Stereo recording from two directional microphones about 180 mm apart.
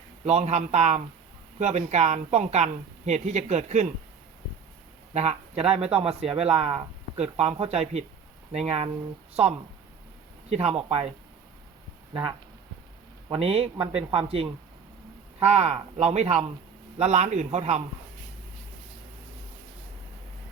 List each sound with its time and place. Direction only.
0.3 s speech: 35° right (ahead or behind)
5.1 s speech: 35° right (ahead or behind)
13.2 s a man's voice: 30° right (ahead or behind)
15.4 s speech: 35° right (ahead or behind)